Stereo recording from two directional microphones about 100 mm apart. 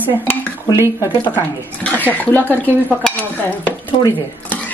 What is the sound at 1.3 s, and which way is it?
Dishes, 15° left (ahead or behind).